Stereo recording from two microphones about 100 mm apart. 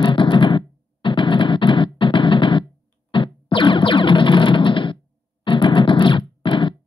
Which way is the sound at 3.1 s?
55° left (ahead or behind).